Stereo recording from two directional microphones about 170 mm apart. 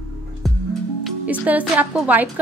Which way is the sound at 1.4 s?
10° right (ahead or behind).